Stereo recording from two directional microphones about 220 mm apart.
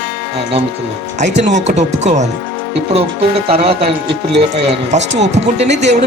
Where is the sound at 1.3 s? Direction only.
50° right (ahead or behind).